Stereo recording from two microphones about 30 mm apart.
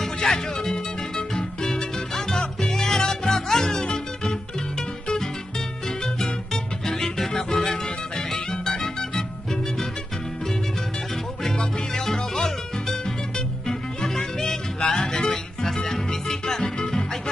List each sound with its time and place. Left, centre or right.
0.0 s music: centre
6.2 s music: centre
11.5 s music: left
13.7 s music: centre